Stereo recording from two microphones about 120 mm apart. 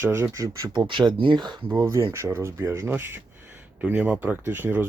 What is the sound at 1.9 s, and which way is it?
Speech, 25° right (ahead or behind).